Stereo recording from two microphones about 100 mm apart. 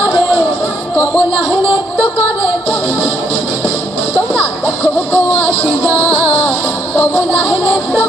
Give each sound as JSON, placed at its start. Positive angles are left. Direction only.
{"t": 4.6, "sound": "music", "side_deg": 20}